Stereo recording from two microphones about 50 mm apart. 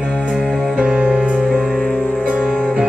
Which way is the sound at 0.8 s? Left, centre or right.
Centre.